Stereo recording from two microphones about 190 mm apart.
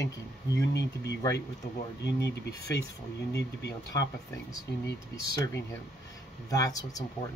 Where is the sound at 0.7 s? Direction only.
65° left (ahead or behind).